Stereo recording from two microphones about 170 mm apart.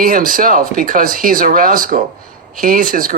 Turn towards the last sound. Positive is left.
turn(degrees=-55)  # may be behind; listen again after turning